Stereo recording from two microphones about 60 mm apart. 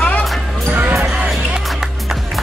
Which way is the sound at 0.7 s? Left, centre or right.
Right.